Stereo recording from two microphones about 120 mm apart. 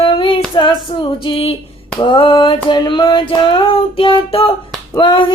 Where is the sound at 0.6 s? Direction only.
40° left (ahead or behind).